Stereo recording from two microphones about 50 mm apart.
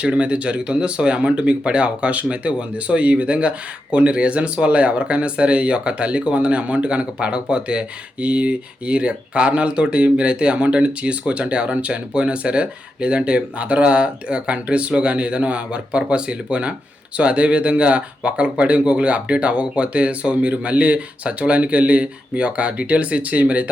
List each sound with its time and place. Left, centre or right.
0.0 s speech: right